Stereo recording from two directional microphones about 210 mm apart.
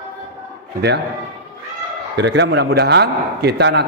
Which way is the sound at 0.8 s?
50° right (ahead or behind).